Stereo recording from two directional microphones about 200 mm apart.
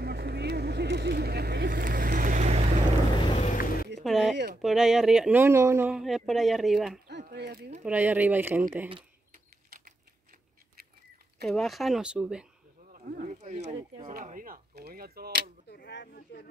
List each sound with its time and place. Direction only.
0.0 s vehicle: 55° right (ahead or behind); by 2.7 s 35° right (ahead or behind)
3.3 s mechanisms: 40° left (ahead or behind)
4.0 s a sound: centre (ahead or behind)
4.6 s speech: centre (ahead or behind)
7.1 s a sound: 55° right (ahead or behind)
7.8 s speech: 10° right (ahead or behind)
11.4 s speech: centre (ahead or behind)
12.9 s speech: 35° right (ahead or behind)
15.7 s speech: 55° left (ahead or behind)